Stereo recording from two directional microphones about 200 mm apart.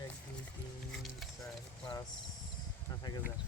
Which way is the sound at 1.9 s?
20° left (ahead or behind).